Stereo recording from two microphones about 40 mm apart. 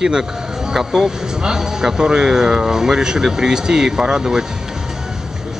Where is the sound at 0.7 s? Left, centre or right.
Centre.